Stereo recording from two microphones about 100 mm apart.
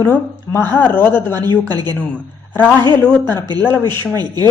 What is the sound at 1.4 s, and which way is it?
Speech, 45° right (ahead or behind).